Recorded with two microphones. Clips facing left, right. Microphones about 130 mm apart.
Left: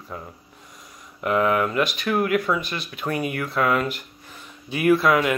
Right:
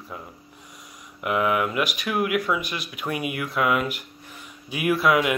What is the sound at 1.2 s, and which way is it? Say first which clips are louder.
Speech: left 2 dB; 10° right (ahead or behind).